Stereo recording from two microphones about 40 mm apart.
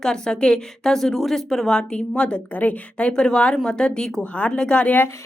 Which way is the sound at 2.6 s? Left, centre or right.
Left.